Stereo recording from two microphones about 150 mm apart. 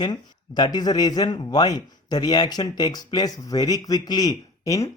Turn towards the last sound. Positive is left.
turn(degrees=20)  # may be behind; listen again after turning